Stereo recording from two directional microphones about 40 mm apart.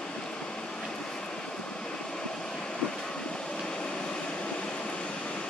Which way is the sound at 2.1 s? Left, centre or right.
Centre.